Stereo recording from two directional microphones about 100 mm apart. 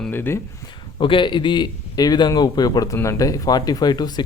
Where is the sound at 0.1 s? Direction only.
20° left (ahead or behind).